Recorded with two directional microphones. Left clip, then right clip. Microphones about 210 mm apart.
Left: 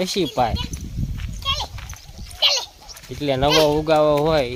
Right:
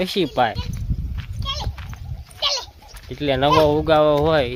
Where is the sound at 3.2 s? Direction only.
5° right (ahead or behind).